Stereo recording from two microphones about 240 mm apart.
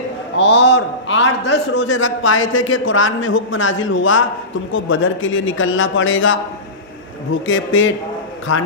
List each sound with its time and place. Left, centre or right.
0.4 s a man's voice: left
7.4 s a man's voice: left